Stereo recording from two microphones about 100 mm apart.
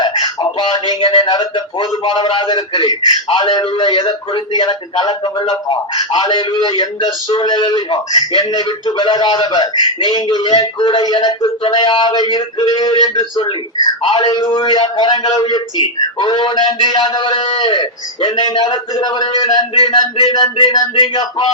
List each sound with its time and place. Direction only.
0.0 s a man's voice: 45° left (ahead or behind)